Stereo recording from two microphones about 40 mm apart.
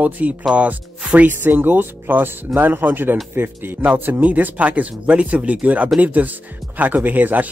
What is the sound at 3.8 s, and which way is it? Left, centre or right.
Speech, right.